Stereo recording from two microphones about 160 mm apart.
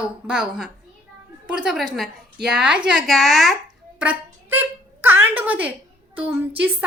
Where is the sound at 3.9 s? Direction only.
10° right (ahead or behind).